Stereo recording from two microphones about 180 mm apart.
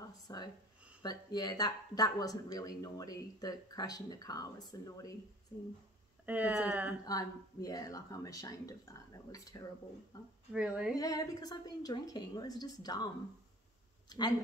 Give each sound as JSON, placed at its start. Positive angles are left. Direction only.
{"t": 0.3, "sound": "speech", "side_deg": 20}
{"t": 6.2, "sound": "speech", "side_deg": -10}
{"t": 7.1, "sound": "speech", "side_deg": 20}
{"t": 10.5, "sound": "speech", "side_deg": -5}
{"t": 11.0, "sound": "speech", "side_deg": 20}